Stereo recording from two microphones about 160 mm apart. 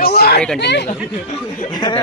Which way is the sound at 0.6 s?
90° left.